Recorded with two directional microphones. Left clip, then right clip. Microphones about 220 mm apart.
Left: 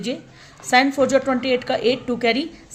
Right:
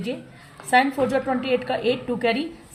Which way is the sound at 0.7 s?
40° left (ahead or behind).